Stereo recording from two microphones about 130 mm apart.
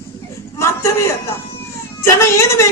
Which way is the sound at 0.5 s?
25° left (ahead or behind).